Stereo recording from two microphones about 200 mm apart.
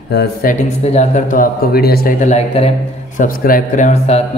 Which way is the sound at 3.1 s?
45° left (ahead or behind).